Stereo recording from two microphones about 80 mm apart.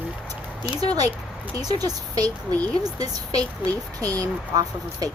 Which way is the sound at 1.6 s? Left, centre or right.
Right.